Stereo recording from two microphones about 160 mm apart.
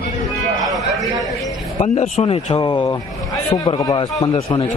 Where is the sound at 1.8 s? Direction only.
45° left (ahead or behind).